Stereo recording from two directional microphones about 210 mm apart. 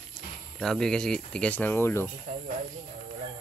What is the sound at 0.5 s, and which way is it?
Speech, centre (ahead or behind).